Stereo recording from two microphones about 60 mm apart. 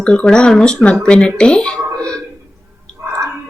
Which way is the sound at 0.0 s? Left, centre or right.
Centre.